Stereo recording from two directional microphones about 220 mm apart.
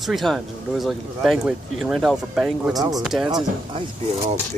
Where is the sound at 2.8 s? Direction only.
15° right (ahead or behind).